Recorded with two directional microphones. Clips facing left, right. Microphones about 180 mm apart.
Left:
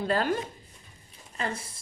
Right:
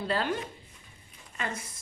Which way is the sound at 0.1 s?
45° left (ahead or behind).